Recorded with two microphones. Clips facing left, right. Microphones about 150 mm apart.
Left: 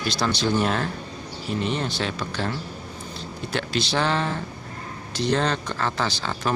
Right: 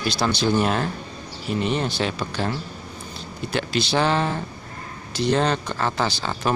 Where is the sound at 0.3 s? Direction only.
10° right (ahead or behind).